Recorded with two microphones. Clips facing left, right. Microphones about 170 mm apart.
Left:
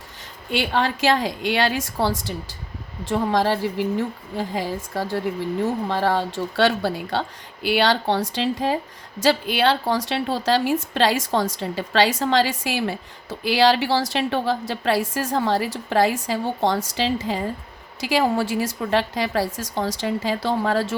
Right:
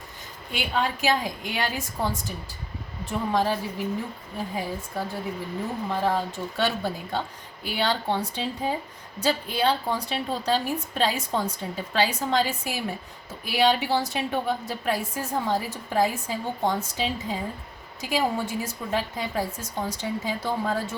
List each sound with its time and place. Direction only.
0.5 s a woman's voice: 80° left